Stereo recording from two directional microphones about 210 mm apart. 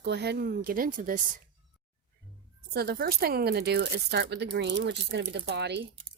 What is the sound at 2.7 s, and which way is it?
Speech, 45° right (ahead or behind).